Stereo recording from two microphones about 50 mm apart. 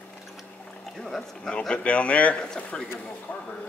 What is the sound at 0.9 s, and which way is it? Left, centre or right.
A man's voice, centre.